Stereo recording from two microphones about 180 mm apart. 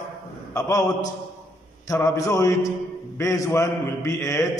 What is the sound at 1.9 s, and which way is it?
A man's voice, 15° left (ahead or behind).